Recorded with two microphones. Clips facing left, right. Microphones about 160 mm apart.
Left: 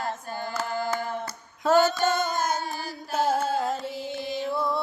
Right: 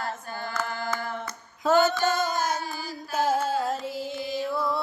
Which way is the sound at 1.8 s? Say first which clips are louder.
Even; centre (ahead or behind).